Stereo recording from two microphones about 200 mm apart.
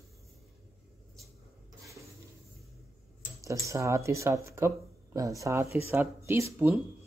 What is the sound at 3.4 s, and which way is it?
Speech, 15° right (ahead or behind).